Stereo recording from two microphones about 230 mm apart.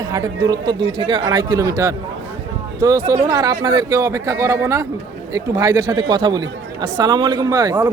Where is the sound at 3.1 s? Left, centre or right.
Centre.